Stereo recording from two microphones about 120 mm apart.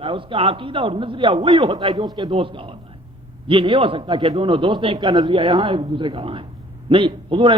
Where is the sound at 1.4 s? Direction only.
35° right (ahead or behind).